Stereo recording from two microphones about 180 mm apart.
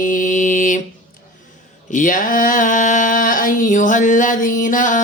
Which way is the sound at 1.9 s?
45° left (ahead or behind).